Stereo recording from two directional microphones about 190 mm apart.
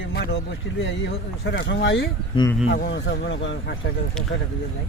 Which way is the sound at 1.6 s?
65° left (ahead or behind).